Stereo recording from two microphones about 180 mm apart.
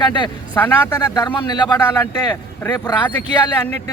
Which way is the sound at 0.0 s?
25° left (ahead or behind).